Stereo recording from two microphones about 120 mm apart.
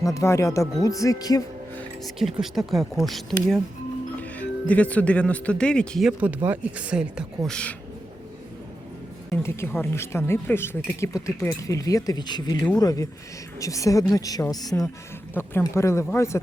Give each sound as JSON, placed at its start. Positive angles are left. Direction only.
{"t": 0.0, "sound": "speech", "side_deg": 25}
{"t": 2.0, "sound": "speech", "side_deg": 0}
{"t": 6.1, "sound": "speech", "side_deg": -10}
{"t": 7.4, "sound": "speech", "side_deg": 10}
{"t": 9.3, "sound": "a woman's voice", "side_deg": 20}
{"t": 15.4, "sound": "speech", "side_deg": 20}